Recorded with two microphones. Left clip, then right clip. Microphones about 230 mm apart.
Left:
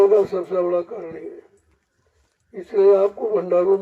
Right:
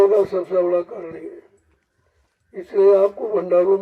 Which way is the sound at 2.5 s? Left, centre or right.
Right.